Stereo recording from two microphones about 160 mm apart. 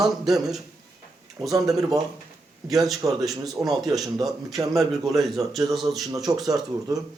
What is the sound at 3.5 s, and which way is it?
Speech, centre (ahead or behind).